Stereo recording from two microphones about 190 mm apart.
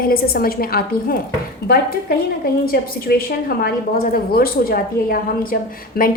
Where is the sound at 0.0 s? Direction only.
50° left (ahead or behind).